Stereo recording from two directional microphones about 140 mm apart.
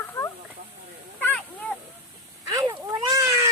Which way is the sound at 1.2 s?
10° left (ahead or behind).